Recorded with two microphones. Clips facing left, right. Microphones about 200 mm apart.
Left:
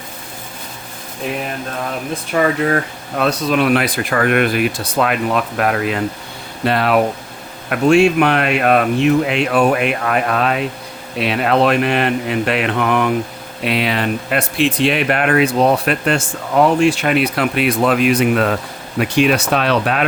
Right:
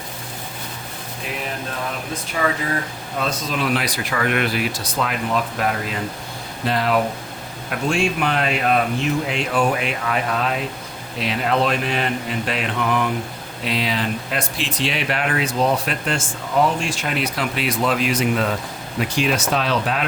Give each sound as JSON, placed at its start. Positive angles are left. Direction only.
{"t": 2.3, "sound": "speech", "side_deg": 65}